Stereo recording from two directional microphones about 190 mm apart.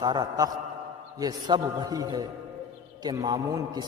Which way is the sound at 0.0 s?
20° right (ahead or behind).